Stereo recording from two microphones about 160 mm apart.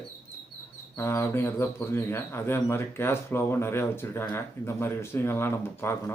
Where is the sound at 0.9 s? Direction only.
15° left (ahead or behind).